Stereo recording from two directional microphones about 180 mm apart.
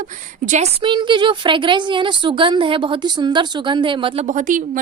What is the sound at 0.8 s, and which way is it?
A woman's voice, 25° right (ahead or behind).